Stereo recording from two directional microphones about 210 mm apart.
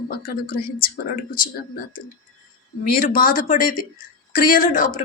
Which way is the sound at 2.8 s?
40° left (ahead or behind).